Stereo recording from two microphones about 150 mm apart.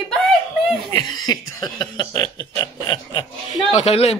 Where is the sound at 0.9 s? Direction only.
25° left (ahead or behind).